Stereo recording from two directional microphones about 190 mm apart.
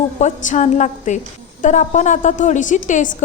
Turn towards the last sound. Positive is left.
turn(degrees=40)  # may be behind; listen again after turning